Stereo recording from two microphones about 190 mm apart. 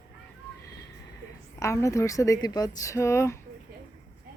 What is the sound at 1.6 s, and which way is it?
A woman's voice, 15° left (ahead or behind).